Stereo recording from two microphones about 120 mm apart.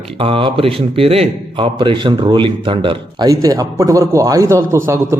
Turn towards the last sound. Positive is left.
turn(degrees=-25)  # may be behind; listen again after turning